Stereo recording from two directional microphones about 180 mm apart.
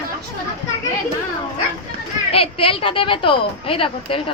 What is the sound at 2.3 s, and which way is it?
A woman's voice, 30° left (ahead or behind).